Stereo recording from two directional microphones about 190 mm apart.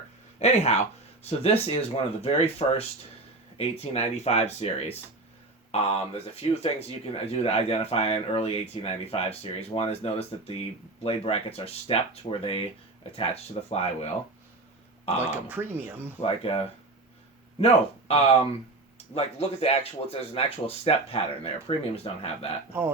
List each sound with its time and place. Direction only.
0.3 s speech: 35° left (ahead or behind)
15.2 s speech: 10° right (ahead or behind)
16.2 s speech: 30° left (ahead or behind)
17.6 s speech: 30° left (ahead or behind)